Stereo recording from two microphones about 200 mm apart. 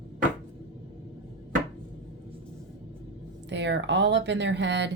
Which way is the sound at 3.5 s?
60° right (ahead or behind).